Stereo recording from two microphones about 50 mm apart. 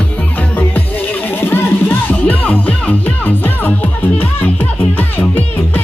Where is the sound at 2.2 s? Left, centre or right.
Left.